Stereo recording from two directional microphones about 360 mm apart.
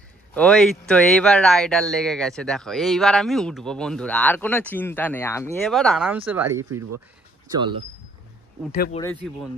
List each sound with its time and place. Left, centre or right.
0.3 s speech: centre
8.7 s speech: left
9.0 s speech: centre